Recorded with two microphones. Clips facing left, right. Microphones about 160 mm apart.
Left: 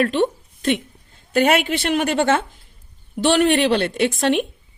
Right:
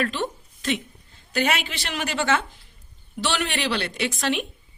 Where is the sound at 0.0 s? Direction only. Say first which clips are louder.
Left 8 dB; 55° left (ahead or behind).